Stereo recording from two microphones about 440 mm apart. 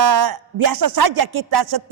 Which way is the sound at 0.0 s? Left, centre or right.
Right.